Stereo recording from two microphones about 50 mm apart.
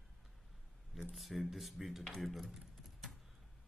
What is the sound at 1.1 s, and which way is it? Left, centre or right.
Speech, centre.